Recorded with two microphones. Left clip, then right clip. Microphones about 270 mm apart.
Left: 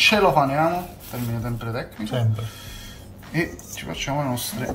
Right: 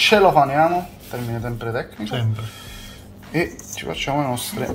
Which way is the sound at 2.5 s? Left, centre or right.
Centre.